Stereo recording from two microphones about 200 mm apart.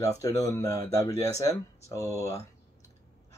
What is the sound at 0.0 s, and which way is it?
Speech, 15° left (ahead or behind).